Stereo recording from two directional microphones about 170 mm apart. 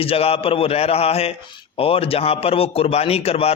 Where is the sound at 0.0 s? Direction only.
35° left (ahead or behind).